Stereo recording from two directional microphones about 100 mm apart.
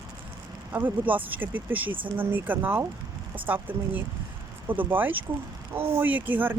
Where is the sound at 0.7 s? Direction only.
20° right (ahead or behind).